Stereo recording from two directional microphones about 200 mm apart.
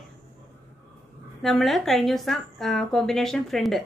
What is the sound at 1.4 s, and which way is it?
A woman's voice, centre (ahead or behind).